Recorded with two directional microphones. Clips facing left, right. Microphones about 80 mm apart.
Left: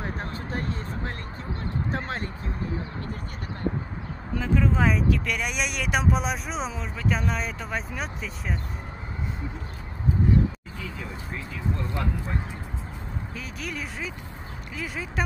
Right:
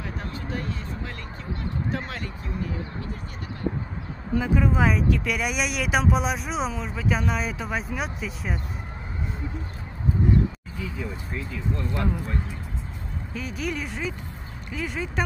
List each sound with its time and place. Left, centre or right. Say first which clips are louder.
0.2 s a sound: even; left
1.9 s speech: even; left
4.4 s speech: right 1 dB; centre
13.3 s speech: right 8 dB; centre